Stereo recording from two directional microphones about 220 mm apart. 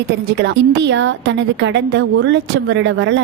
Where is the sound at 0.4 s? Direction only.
50° right (ahead or behind).